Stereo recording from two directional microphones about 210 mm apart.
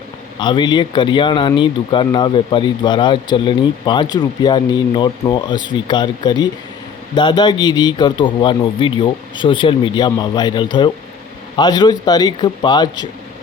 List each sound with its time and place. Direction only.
0.3 s speech: 20° left (ahead or behind)